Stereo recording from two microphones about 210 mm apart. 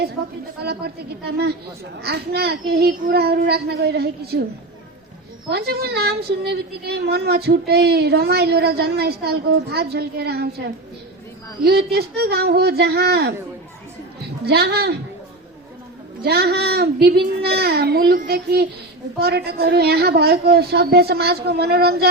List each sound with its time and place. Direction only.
1.2 s a woman's voice: 50° right (ahead or behind)
5.5 s a woman's voice: 50° right (ahead or behind)
11.6 s a woman's voice: 50° right (ahead or behind)
14.4 s a woman's voice: 50° right (ahead or behind)
16.2 s a woman's voice: 50° right (ahead or behind)